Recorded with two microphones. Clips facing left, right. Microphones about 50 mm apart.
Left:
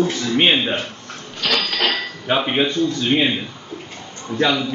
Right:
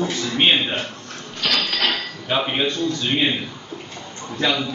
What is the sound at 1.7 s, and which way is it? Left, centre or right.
Speech, left.